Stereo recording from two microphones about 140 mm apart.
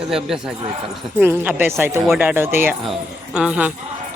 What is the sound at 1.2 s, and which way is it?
Speech, 15° right (ahead or behind).